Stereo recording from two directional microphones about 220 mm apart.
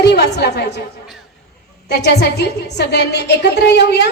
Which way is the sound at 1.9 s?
50° left (ahead or behind).